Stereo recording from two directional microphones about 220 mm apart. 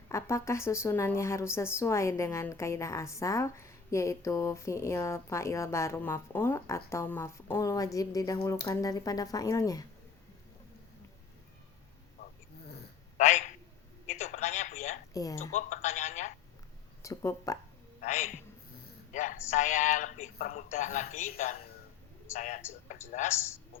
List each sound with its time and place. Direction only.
0.1 s a woman's voice: 15° left (ahead or behind)
13.1 s a man's voice: 30° left (ahead or behind)
14.2 s radio: 30° left (ahead or behind)
15.1 s speech: 15° left (ahead or behind)
15.5 s telephone: 30° left (ahead or behind)
17.0 s speech: 15° left (ahead or behind)
19.1 s a woman's voice: 35° left (ahead or behind)
22.6 s a woman's voice: 10° left (ahead or behind)
23.1 s a woman's voice: 40° left (ahead or behind)